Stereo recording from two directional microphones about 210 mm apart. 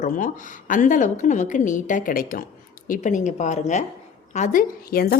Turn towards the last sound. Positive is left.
turn(degrees=45)  # may be behind; listen again after turning